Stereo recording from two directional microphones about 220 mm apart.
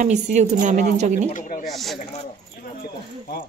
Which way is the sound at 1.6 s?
Centre (ahead or behind).